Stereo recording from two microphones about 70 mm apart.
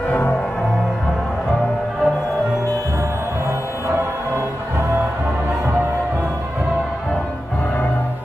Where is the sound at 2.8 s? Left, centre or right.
Right.